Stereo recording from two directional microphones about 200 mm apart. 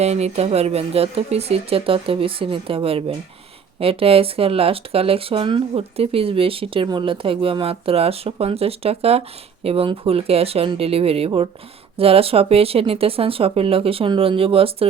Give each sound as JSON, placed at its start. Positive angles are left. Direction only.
{"t": 0.0, "sound": "speech", "side_deg": -35}